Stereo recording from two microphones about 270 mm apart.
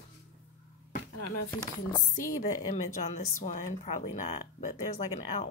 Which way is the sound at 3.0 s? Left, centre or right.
Left.